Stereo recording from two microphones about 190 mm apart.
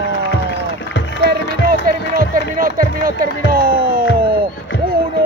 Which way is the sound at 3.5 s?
50° right (ahead or behind).